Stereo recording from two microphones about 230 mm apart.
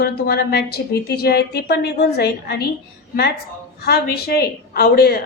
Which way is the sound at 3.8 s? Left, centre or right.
Left.